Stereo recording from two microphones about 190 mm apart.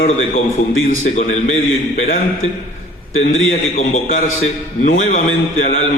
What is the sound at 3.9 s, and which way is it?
A man's voice, 40° left (ahead or behind).